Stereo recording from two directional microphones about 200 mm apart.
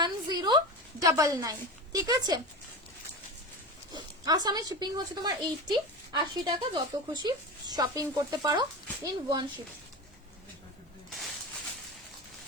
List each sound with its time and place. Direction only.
0.0 s a sound: 20° right (ahead or behind)
1.0 s a woman's voice: 15° right (ahead or behind)
3.9 s a woman's voice: 20° right (ahead or behind)